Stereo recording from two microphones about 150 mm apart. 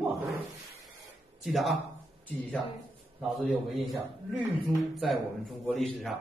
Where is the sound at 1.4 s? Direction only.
Centre (ahead or behind).